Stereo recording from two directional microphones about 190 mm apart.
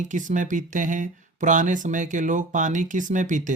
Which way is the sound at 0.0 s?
40° right (ahead or behind).